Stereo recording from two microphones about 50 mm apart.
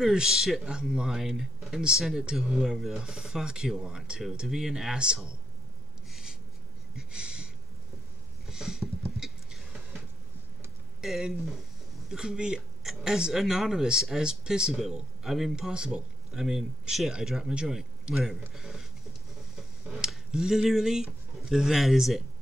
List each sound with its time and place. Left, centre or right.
0.0 s speech: centre
6.0 s a sound: centre
11.0 s speech: centre